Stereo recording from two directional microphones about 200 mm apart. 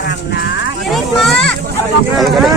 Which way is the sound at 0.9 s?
Centre (ahead or behind).